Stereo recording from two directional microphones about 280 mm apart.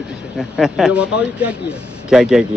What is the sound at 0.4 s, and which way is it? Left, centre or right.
A man's voice, centre.